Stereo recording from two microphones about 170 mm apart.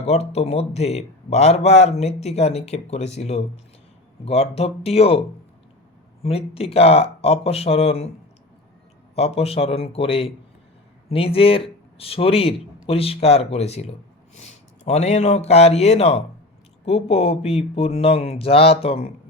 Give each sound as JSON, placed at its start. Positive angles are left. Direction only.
{"t": 0.0, "sound": "a man's voice", "side_deg": 40}
{"t": 6.2, "sound": "a man's voice", "side_deg": 35}
{"t": 9.1, "sound": "a man's voice", "side_deg": 35}